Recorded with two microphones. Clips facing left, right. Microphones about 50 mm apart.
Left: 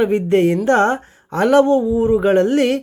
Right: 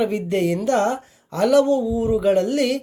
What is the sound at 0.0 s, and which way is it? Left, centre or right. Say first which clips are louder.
Speech: left 6 dB; left.